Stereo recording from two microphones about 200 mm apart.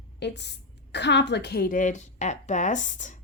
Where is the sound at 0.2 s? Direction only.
60° left (ahead or behind).